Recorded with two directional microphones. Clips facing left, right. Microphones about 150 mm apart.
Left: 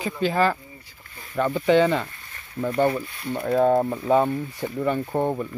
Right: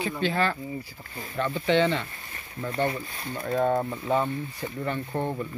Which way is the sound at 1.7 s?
10° left (ahead or behind).